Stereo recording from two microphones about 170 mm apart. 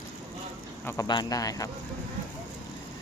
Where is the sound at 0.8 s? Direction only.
20° left (ahead or behind).